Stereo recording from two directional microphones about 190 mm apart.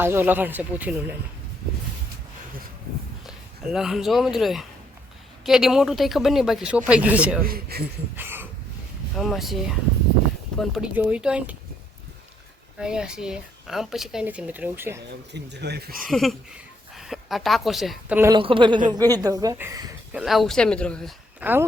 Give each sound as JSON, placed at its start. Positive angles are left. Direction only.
{"t": 0.0, "sound": "speech", "side_deg": -10}
{"t": 3.2, "sound": "speech", "side_deg": -5}
{"t": 7.4, "sound": "speech", "side_deg": -55}
{"t": 8.1, "sound": "a sound", "side_deg": -10}
{"t": 9.1, "sound": "speech", "side_deg": 0}
{"t": 12.8, "sound": "speech", "side_deg": -5}
{"t": 15.3, "sound": "speech", "side_deg": -60}
{"t": 16.0, "sound": "a woman's voice", "side_deg": 0}
{"t": 18.3, "sound": "speech", "side_deg": -25}
{"t": 20.1, "sound": "speech", "side_deg": 0}
{"t": 21.4, "sound": "speech", "side_deg": -10}